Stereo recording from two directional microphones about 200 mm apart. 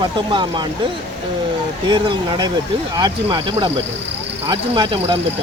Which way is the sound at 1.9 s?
20° right (ahead or behind).